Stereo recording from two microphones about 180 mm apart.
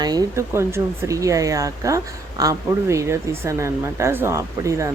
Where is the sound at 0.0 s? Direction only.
20° right (ahead or behind).